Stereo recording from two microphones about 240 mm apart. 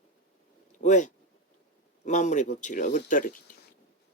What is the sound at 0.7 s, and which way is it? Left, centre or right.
Speech, left.